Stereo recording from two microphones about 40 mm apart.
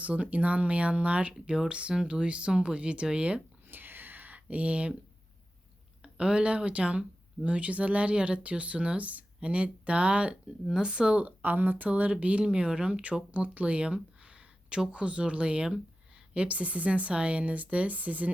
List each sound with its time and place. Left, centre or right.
0.1 s speech: right
3.7 s a sound: right
4.4 s speech: right
6.0 s a sound: right
6.7 s speech: right
11.4 s speech: right
11.9 s speech: right
13.3 s a sound: right
14.9 s speech: right